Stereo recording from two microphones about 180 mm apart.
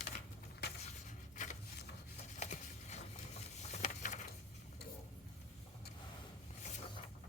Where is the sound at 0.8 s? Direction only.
45° left (ahead or behind).